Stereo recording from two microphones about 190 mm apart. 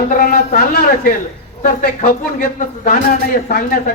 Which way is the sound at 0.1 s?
50° left (ahead or behind).